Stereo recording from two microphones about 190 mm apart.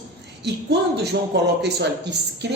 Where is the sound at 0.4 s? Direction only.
60° right (ahead or behind).